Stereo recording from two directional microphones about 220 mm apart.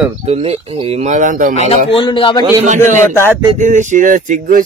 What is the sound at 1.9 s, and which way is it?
Speech, 20° left (ahead or behind).